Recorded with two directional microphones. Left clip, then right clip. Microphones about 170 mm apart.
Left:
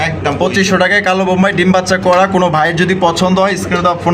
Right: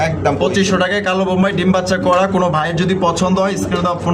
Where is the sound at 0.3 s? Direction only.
25° left (ahead or behind).